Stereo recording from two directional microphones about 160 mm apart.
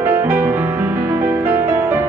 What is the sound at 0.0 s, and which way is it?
Music, 10° right (ahead or behind).